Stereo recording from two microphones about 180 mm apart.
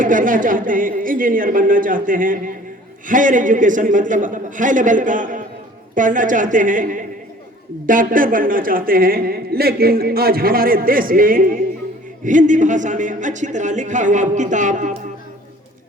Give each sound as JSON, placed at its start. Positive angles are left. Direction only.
{"t": 0.0, "sound": "a woman's voice", "side_deg": -45}